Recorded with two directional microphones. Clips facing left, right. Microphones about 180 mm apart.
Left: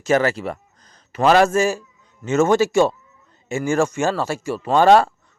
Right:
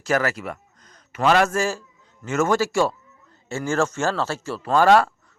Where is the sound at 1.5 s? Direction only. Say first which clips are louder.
Left 5 dB; 20° left (ahead or behind).